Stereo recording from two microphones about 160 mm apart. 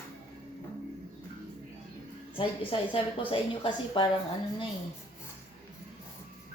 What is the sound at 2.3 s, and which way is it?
A woman's voice, 35° left (ahead or behind).